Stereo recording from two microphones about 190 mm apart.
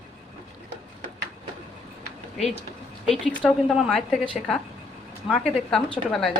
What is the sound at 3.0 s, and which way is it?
A woman's voice, centre (ahead or behind).